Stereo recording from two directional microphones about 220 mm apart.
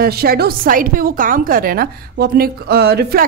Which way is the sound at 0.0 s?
45° right (ahead or behind).